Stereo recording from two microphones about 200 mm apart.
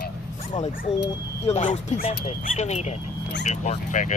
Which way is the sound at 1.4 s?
35° left (ahead or behind).